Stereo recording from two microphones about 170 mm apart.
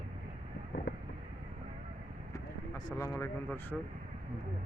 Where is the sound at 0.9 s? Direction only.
70° left (ahead or behind).